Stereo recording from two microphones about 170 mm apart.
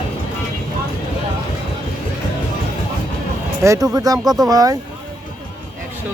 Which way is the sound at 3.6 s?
15° right (ahead or behind).